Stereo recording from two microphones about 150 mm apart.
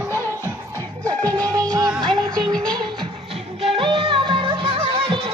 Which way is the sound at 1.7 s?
25° right (ahead or behind).